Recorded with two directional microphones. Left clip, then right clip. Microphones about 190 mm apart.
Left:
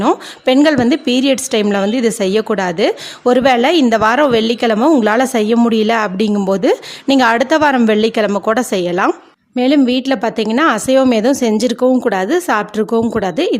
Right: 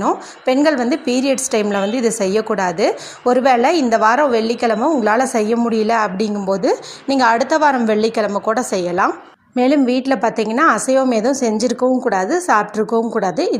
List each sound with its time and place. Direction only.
0.0 s speech: 40° left (ahead or behind)